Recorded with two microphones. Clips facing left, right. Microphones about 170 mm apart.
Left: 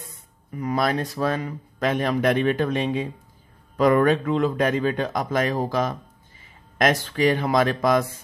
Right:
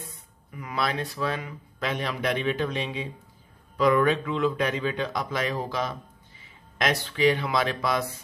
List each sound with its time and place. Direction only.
0.5 s speech: 40° left (ahead or behind)